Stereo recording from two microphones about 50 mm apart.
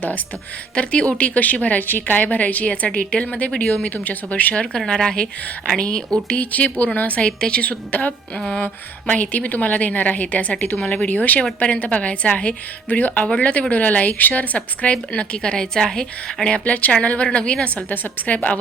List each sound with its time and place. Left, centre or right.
0.8 s a woman's voice: left
4.5 s a woman's voice: centre
6.2 s a woman's voice: left
17.8 s a woman's voice: left